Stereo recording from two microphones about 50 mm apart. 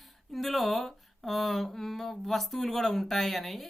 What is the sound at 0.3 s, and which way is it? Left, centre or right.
Speech, centre.